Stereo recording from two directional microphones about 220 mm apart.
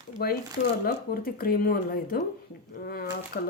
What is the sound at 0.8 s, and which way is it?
Speech, 40° left (ahead or behind).